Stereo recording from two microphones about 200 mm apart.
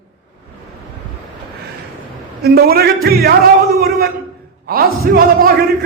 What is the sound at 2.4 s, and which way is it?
A man's voice, 50° right (ahead or behind).